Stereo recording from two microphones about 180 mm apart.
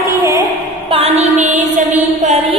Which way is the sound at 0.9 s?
35° right (ahead or behind).